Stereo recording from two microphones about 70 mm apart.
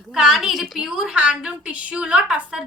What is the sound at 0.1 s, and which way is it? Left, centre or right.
A woman's voice, centre.